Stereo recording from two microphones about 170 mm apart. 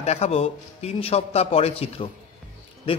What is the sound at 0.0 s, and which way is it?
A man's voice, 40° left (ahead or behind).